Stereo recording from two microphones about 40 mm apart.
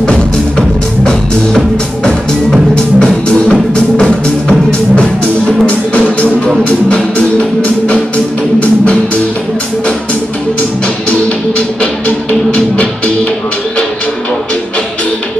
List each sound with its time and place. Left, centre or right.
0.6 s music: centre
2.7 s music: left
5.7 s music: left
11.1 s music: left